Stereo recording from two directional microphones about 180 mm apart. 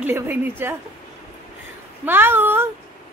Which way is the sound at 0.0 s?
10° right (ahead or behind).